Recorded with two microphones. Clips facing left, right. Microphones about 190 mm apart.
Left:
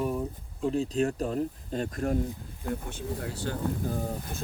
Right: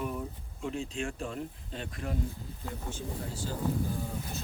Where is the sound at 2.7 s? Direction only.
60° left (ahead or behind).